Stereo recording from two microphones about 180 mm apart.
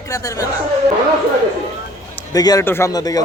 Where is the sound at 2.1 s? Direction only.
20° left (ahead or behind).